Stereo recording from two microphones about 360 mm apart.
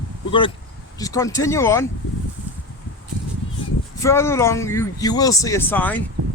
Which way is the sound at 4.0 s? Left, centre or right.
Centre.